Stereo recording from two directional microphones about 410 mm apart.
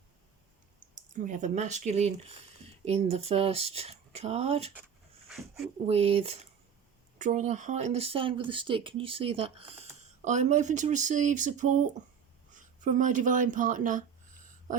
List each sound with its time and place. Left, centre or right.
0.9 s speech: centre
5.3 s speech: centre
5.8 s speech: centre
12.5 s a sound: centre
13.2 s speech: centre